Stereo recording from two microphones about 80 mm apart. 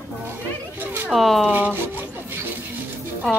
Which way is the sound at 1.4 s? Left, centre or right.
Right.